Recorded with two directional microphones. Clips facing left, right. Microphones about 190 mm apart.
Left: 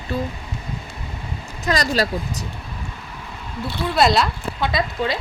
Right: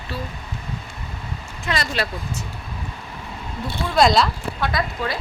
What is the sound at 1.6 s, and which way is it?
Speech, 40° left (ahead or behind).